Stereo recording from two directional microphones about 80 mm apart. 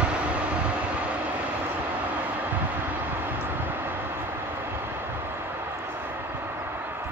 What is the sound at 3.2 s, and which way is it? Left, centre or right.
Vehicle, right.